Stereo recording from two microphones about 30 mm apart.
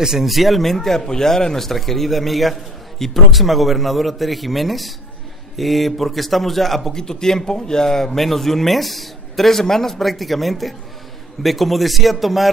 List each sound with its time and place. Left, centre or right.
0.0 s speech: centre
0.3 s speech: centre
0.6 s a man's voice: centre
1.7 s speech: centre
6.9 s a man's voice: centre